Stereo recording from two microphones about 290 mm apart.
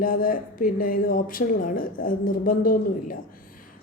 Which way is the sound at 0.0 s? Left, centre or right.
Left.